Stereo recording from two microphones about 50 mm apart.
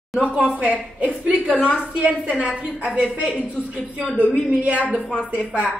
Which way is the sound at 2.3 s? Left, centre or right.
Right.